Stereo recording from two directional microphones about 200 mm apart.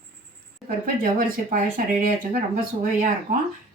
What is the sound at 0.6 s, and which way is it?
Speech, 45° right (ahead or behind).